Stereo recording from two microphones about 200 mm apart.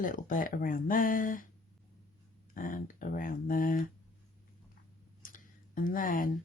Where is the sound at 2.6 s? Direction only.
45° left (ahead or behind).